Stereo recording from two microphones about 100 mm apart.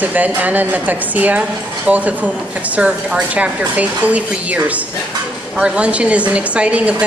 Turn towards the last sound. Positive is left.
turn(degrees=-10)  # may be behind; listen again after turning